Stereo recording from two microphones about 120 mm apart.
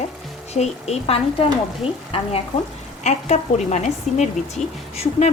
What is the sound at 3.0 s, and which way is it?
Speech, 75° left (ahead or behind).